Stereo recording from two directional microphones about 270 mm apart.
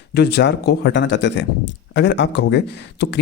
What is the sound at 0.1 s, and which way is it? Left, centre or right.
A man's voice, left.